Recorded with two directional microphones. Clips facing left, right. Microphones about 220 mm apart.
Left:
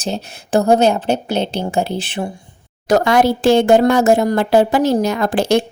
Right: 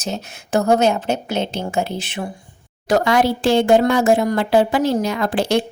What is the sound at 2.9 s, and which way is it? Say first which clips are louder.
Speech: left 3 dB; 45° left (ahead or behind).